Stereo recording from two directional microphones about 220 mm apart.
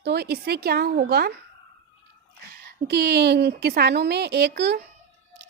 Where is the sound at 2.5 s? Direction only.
45° right (ahead or behind).